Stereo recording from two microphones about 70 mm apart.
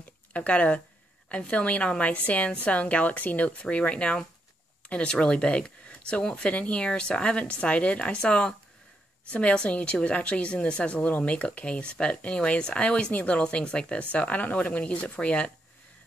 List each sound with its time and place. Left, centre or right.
0.3 s a woman's voice: centre